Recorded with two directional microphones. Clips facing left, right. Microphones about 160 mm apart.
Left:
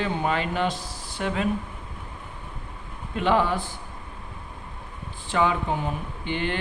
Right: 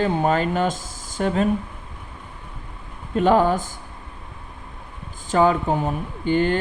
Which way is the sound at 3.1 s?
40° right (ahead or behind).